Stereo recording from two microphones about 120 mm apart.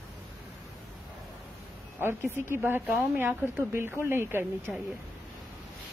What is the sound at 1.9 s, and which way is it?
Speech, 20° right (ahead or behind).